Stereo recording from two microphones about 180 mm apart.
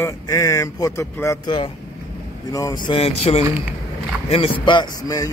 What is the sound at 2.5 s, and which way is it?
A man's voice, 20° left (ahead or behind).